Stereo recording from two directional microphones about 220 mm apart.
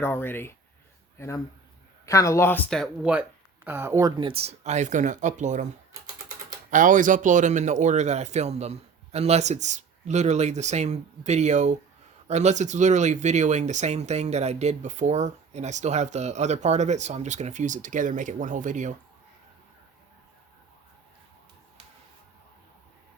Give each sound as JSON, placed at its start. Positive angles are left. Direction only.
{"t": 0.0, "sound": "speech", "side_deg": 10}
{"t": 2.0, "sound": "speech", "side_deg": 15}
{"t": 6.7, "sound": "speech", "side_deg": -35}